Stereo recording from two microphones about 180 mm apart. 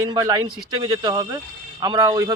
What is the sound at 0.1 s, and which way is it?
A man's voice, 20° right (ahead or behind).